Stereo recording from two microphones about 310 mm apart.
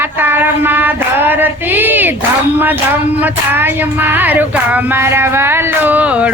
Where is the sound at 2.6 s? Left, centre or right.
Centre.